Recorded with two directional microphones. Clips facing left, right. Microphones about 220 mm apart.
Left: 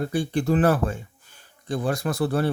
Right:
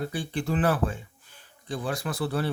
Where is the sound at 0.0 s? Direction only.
45° left (ahead or behind).